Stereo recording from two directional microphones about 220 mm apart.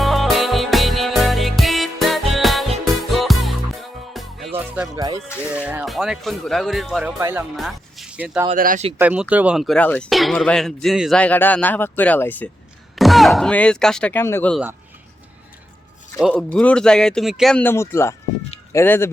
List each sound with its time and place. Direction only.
0.0 s music: centre (ahead or behind)
4.9 s speech: 15° right (ahead or behind)
5.3 s speech: 10° left (ahead or behind)
5.6 s speech: 5° right (ahead or behind)
7.2 s speech: 10° right (ahead or behind)
7.5 s speech: centre (ahead or behind)
8.4 s speech: 40° right (ahead or behind)
9.0 s speech: 5° right (ahead or behind)
16.2 s speech: 5° left (ahead or behind)